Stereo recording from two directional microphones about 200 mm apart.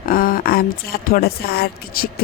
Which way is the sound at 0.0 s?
45° left (ahead or behind).